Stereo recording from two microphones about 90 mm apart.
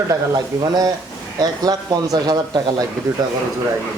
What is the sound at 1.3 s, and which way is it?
Speech, 45° right (ahead or behind).